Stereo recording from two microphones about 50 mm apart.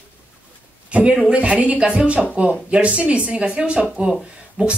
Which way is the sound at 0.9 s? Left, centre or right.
Right.